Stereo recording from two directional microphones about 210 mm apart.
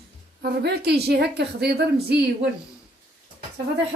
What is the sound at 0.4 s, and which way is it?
A woman's voice, 50° right (ahead or behind).